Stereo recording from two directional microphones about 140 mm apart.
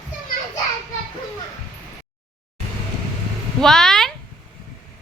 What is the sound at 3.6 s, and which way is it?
Speech, 5° left (ahead or behind).